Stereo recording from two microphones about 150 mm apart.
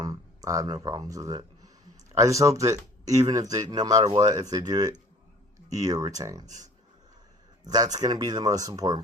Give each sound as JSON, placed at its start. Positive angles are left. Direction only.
{"t": 0.0, "sound": "speech", "side_deg": -25}
{"t": 7.6, "sound": "speech", "side_deg": -25}